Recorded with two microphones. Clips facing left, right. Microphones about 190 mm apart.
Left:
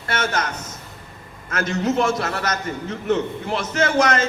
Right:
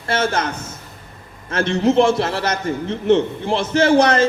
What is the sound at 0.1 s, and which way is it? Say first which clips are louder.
A man's voice: right 4 dB; 30° right (ahead or behind).